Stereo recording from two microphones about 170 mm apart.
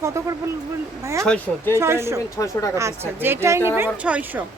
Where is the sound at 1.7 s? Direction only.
15° right (ahead or behind).